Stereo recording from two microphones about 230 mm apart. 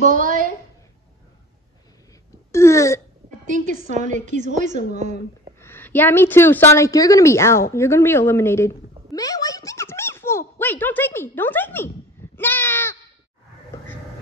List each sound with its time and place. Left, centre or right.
0.0 s a woman's voice: right
2.5 s a woman's voice: centre
3.4 s a woman's voice: right
5.6 s a woman's voice: centre
7.7 s a sound: centre